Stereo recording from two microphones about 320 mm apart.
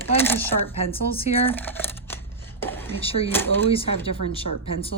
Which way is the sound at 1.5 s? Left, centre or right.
Centre.